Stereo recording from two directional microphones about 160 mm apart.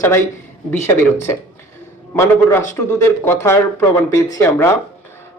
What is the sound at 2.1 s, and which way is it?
Speech, 15° left (ahead or behind).